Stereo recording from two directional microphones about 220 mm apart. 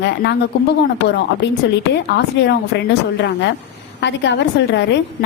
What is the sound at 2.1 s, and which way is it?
A woman's voice, 50° left (ahead or behind).